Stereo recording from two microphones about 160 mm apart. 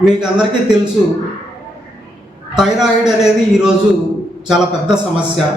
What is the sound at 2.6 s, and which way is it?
A man's voice, 5° right (ahead or behind).